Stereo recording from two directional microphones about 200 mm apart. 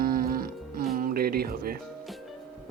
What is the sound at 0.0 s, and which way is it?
Music, 45° right (ahead or behind).